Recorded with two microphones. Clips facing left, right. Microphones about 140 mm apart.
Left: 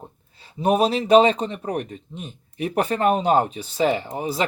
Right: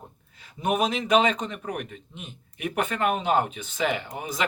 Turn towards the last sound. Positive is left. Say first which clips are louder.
# left 6 dB
turn(degrees=35)  # may be behind; listen again after turning